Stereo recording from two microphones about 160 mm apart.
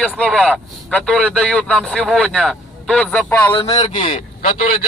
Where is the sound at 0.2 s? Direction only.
5° left (ahead or behind).